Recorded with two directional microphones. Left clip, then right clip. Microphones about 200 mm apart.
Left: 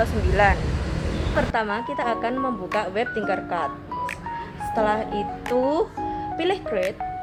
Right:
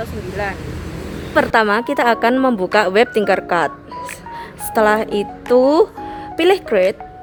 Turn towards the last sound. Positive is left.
turn(degrees=-50)  # may be behind; listen again after turning